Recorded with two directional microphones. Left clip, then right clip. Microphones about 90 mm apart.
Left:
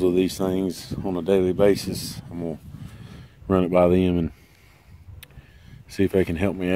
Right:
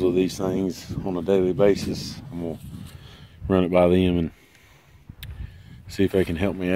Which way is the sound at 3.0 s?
5° left (ahead or behind).